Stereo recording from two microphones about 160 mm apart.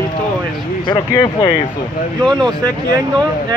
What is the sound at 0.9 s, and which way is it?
Speech, 30° left (ahead or behind).